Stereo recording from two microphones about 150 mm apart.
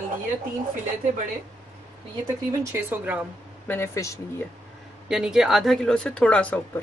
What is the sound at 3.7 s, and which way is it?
Speech, 20° left (ahead or behind).